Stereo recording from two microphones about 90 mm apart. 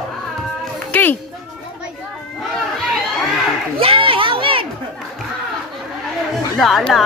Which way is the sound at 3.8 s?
90° right.